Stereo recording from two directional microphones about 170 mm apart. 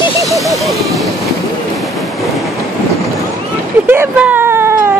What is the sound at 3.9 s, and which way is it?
Speech, 10° right (ahead or behind).